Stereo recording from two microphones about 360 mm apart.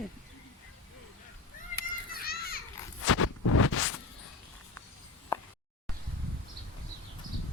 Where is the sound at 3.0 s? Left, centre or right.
Left.